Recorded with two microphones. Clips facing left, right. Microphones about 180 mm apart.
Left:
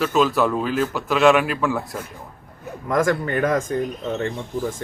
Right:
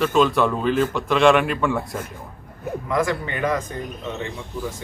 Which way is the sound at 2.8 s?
45° left (ahead or behind).